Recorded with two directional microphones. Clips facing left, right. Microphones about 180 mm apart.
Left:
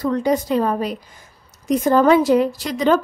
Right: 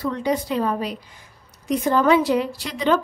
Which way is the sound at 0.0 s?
45° left (ahead or behind).